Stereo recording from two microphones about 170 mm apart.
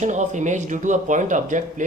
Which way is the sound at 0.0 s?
45° right (ahead or behind).